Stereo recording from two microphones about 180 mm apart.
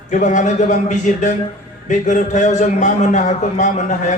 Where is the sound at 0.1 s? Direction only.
45° left (ahead or behind).